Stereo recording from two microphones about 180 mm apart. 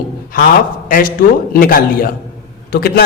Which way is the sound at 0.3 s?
50° left (ahead or behind).